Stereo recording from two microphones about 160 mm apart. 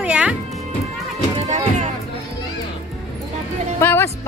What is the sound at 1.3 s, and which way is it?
Music, 45° right (ahead or behind).